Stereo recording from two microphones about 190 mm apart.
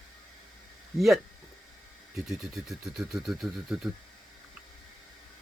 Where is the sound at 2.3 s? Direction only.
Centre (ahead or behind).